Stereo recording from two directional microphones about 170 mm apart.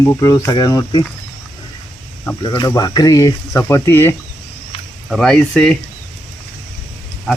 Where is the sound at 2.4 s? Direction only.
25° left (ahead or behind).